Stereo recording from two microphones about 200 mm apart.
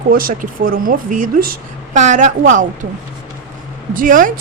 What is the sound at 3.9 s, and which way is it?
Speech, 45° right (ahead or behind).